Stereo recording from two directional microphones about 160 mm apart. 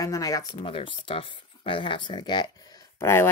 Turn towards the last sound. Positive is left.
turn(degrees=15)  # may be behind; listen again after turning